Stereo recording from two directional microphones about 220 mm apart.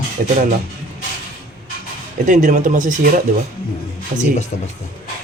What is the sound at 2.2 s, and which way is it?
Speech, 35° right (ahead or behind).